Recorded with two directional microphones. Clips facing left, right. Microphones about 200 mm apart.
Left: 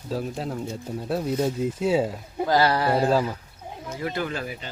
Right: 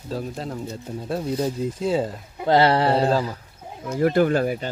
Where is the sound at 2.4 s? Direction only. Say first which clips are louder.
Right 4 dB; 25° right (ahead or behind).